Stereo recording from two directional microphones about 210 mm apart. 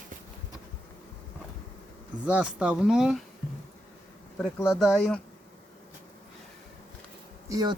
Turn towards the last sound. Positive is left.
turn(degrees=-15)  # may be behind; listen again after turning